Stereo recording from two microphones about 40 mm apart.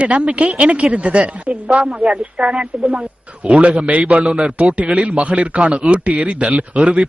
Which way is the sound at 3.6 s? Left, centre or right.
Right.